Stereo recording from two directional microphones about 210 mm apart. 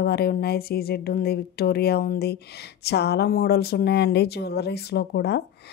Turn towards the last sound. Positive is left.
turn(degrees=50)  # may be behind; listen again after turning